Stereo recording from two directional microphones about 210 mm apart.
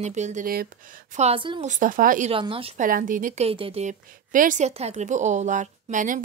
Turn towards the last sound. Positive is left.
turn(degrees=-40)  # may be behind; listen again after turning